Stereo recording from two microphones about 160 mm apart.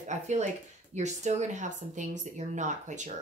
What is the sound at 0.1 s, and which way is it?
Speech, 45° right (ahead or behind).